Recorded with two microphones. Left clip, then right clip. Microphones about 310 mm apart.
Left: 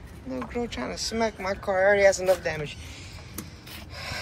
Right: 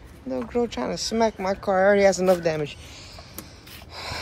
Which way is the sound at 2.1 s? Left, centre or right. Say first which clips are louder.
Right 3 dB; centre.